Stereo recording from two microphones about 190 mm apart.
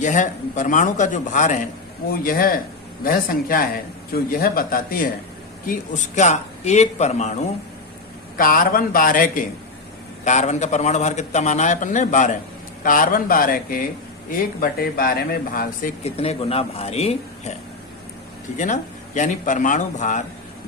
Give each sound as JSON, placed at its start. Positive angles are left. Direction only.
{"t": 0.0, "sound": "a man's voice", "side_deg": 40}
{"t": 8.4, "sound": "a man's voice", "side_deg": 50}
{"t": 16.0, "sound": "a man's voice", "side_deg": 30}
{"t": 18.5, "sound": "a man's voice", "side_deg": 40}